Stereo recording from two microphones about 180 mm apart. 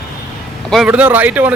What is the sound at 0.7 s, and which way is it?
Speech, 5° right (ahead or behind).